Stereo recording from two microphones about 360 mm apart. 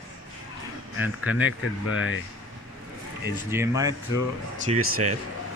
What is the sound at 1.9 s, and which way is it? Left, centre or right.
Speech, left.